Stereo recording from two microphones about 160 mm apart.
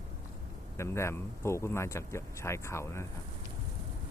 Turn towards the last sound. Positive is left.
turn(degrees=15)  # may be behind; listen again after turning